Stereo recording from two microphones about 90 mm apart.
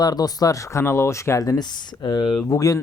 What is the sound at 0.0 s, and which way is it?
Speech, 45° left (ahead or behind).